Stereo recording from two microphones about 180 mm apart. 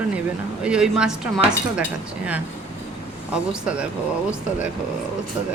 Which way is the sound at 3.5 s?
5° right (ahead or behind).